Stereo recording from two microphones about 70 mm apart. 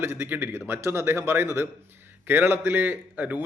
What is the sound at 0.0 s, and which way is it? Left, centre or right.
A man's voice, right.